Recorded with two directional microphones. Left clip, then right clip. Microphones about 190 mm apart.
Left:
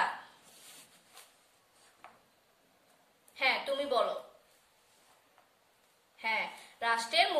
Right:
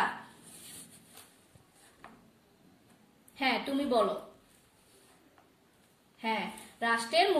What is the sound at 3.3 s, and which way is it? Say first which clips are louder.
Speech: even; 20° left (ahead or behind).